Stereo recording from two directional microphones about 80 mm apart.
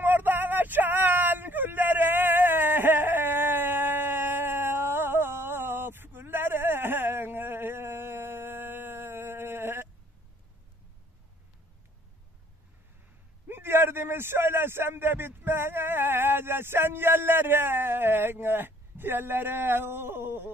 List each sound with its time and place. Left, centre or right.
0.0 s vehicle: right
13.5 s a man's voice: right